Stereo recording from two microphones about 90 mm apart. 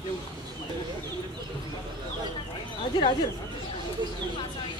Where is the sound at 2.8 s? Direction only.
65° left (ahead or behind).